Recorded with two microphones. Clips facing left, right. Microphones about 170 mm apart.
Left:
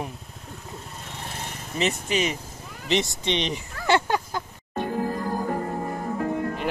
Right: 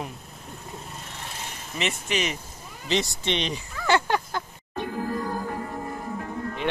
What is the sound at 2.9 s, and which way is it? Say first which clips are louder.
Speech: left 1 dB; 20° left (ahead or behind).